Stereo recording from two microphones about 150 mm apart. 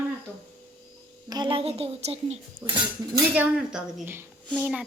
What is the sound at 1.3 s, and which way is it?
Speech, 30° right (ahead or behind).